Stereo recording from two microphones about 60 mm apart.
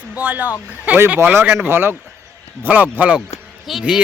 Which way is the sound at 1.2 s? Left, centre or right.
Right.